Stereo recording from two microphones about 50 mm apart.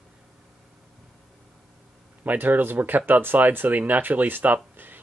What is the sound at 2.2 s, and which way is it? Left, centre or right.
Speech, right.